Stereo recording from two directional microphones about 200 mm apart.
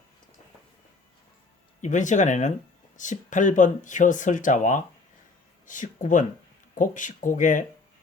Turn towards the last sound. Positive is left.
turn(degrees=40)  # may be behind; listen again after turning